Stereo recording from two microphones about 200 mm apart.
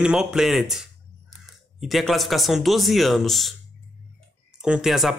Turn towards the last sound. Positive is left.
turn(degrees=0)  # may be behind; listen again after turning